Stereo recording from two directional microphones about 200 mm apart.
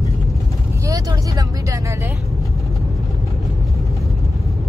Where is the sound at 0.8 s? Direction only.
15° right (ahead or behind).